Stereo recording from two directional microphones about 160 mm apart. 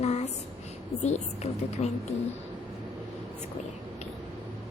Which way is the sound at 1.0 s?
45° left (ahead or behind).